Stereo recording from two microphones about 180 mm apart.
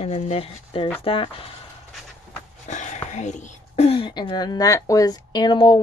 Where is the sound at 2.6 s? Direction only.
40° left (ahead or behind).